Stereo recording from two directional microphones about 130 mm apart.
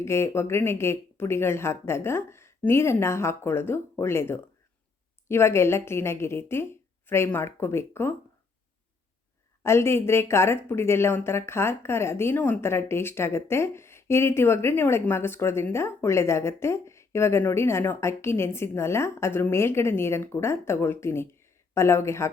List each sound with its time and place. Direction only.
0.0 s speech: 20° left (ahead or behind)
9.6 s speech: 20° left (ahead or behind)